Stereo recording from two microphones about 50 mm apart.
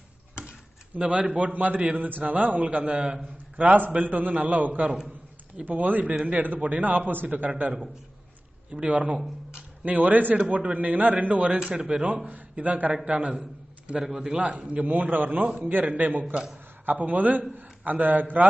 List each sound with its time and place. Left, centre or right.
0.4 s a man's voice: right
8.7 s a man's voice: right
11.7 s speech: centre
12.3 s a man's voice: right
13.4 s a sound: right
14.0 s speech: centre
14.3 s a man's voice: right